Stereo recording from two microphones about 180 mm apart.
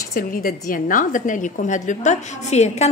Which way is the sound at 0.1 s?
50° left (ahead or behind).